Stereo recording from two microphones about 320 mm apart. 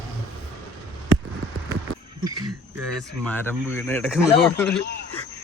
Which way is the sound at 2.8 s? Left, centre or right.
Centre.